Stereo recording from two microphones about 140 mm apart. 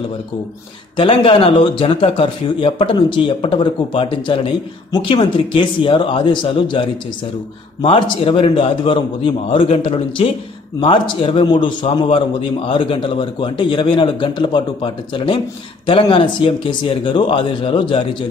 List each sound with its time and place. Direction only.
0.9 s a man's voice: 40° left (ahead or behind)